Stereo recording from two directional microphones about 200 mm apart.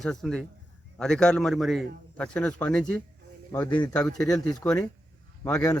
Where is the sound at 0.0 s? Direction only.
Centre (ahead or behind).